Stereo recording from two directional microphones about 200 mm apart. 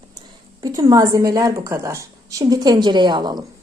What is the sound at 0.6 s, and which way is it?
A woman's voice, 20° right (ahead or behind).